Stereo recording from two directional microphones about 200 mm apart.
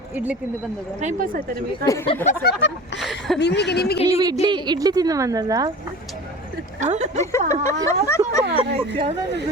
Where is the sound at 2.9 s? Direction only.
60° left (ahead or behind).